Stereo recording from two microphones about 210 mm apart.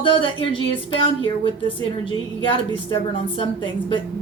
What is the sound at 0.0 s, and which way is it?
A woman's voice, 25° left (ahead or behind).